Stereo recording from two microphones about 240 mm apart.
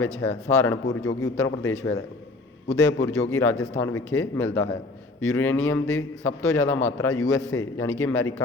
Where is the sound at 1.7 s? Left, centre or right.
Left.